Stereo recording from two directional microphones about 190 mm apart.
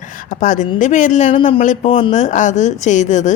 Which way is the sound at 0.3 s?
40° left (ahead or behind).